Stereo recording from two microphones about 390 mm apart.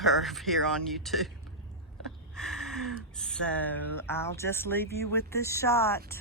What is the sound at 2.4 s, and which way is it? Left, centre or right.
Speech, centre.